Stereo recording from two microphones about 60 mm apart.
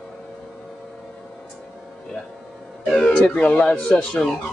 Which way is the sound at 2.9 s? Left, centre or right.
Centre.